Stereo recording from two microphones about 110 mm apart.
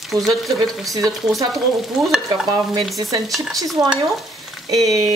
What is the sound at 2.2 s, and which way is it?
Stir, 40° right (ahead or behind).